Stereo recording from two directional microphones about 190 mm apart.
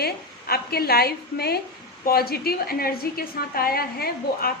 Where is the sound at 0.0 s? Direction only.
55° left (ahead or behind).